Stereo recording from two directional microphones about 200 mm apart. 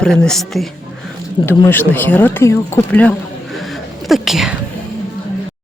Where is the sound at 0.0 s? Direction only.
5° left (ahead or behind).